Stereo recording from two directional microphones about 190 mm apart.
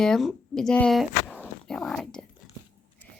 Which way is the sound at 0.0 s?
Centre (ahead or behind).